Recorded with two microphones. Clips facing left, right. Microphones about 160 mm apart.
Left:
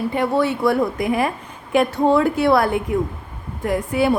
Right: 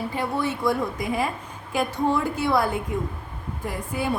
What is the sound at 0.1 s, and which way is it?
A woman's voice, 70° left (ahead or behind).